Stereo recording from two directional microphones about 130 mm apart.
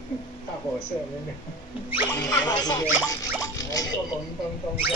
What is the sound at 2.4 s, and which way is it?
Speech, 30° left (ahead or behind).